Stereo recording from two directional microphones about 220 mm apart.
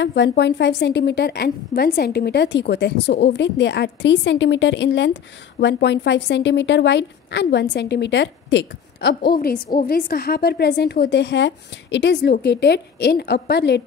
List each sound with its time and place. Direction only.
0.0 s a woman's voice: 50° left (ahead or behind)